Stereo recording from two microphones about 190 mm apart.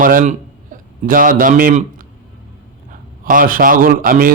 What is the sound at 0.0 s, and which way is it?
A man's voice, 45° right (ahead or behind).